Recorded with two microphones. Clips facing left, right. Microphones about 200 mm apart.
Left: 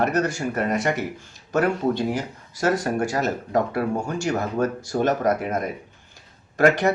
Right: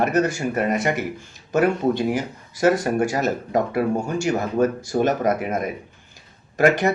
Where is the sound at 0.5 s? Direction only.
5° right (ahead or behind).